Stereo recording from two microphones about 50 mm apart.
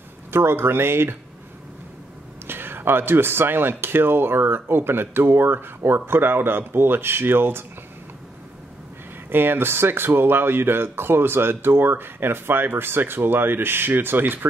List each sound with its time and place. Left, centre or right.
0.3 s speech: right
2.4 s speech: right
9.3 s speech: right